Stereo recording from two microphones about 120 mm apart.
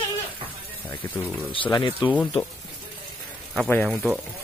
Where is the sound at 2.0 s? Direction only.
40° left (ahead or behind).